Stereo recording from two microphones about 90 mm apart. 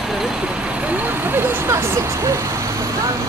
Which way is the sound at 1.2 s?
30° right (ahead or behind).